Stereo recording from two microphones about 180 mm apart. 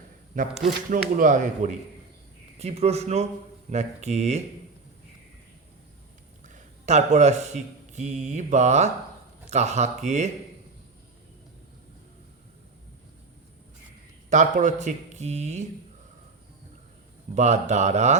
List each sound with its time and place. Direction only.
0.9 s speech: 45° right (ahead or behind)
6.5 s a man's voice: 40° right (ahead or behind)
14.3 s speech: 45° right (ahead or behind)
17.3 s speech: 40° right (ahead or behind)